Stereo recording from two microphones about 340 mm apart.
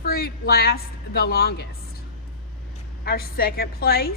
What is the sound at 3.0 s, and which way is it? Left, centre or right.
A woman's voice, left.